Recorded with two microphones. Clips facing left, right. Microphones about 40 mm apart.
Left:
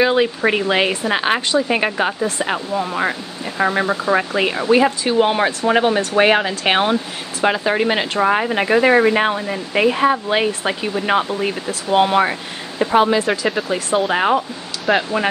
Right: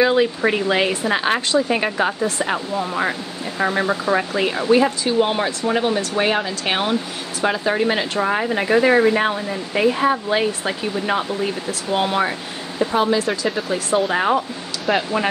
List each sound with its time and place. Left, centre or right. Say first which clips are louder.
0.0 s speech: left 1 dB; centre
14.9 s speech: left 2 dB; centre